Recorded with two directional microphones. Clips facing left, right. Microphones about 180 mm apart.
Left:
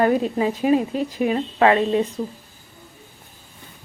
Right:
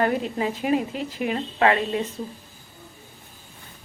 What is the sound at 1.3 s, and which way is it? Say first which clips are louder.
Speech: left 3 dB; 30° left (ahead or behind).